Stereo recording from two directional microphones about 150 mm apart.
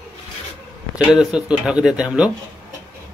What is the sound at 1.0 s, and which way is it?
Speech, 5° right (ahead or behind).